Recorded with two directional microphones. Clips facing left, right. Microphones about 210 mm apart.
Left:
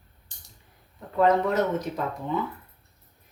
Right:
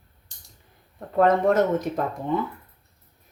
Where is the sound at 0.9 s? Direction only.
50° right (ahead or behind).